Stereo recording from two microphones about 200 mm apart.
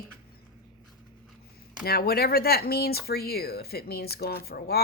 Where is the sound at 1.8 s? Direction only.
50° left (ahead or behind).